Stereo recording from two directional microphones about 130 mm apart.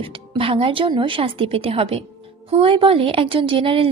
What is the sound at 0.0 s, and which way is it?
Speech, 45° right (ahead or behind).